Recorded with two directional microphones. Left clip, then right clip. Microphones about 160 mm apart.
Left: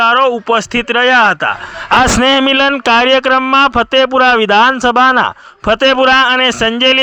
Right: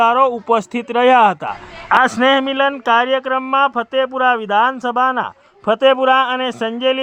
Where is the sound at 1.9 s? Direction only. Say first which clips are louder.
Left 3 dB; 30° left (ahead or behind).